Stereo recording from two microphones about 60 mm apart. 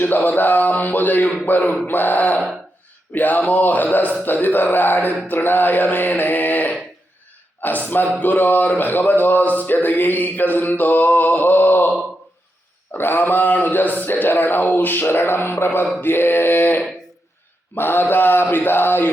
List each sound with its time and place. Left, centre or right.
0.0 s speech: left
12.9 s speech: left